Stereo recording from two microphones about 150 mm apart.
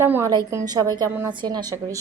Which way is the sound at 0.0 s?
15° right (ahead or behind).